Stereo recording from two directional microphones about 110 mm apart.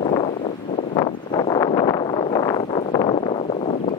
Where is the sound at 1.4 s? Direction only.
40° left (ahead or behind).